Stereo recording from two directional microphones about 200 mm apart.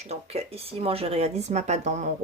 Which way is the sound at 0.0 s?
30° right (ahead or behind).